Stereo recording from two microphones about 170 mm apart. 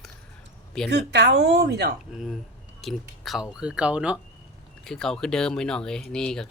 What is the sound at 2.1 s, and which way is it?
Speech, centre (ahead or behind).